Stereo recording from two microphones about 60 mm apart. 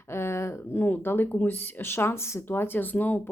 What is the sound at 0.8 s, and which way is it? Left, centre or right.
Speech, left.